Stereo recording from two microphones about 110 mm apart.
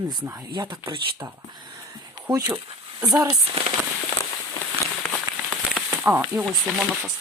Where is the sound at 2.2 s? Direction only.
40° right (ahead or behind).